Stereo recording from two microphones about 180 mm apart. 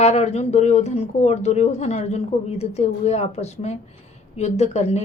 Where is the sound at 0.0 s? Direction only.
40° left (ahead or behind).